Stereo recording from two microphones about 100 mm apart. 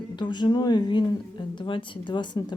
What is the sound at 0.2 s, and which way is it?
Speech, 50° left (ahead or behind).